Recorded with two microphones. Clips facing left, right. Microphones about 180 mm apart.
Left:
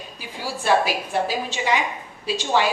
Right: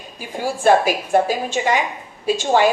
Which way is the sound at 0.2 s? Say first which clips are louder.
Right 10 dB; 50° right (ahead or behind).